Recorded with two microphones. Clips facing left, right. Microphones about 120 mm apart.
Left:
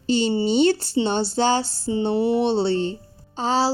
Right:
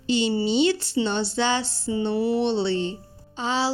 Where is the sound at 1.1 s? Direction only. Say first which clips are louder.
Left 5 dB; 40° left (ahead or behind).